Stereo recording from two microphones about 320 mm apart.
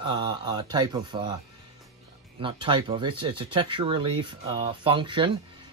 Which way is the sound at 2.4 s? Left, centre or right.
Centre.